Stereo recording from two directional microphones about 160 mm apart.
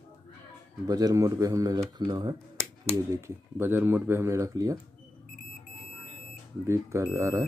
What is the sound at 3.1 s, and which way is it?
Speech, 15° right (ahead or behind).